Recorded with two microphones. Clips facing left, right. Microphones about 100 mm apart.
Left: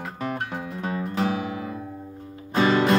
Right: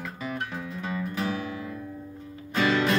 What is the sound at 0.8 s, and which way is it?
Music, 35° left (ahead or behind).